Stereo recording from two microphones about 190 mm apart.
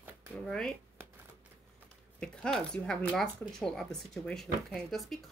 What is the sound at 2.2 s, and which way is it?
Speech, 5° left (ahead or behind).